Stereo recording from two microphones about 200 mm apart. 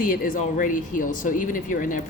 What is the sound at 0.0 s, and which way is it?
Speech, 45° left (ahead or behind).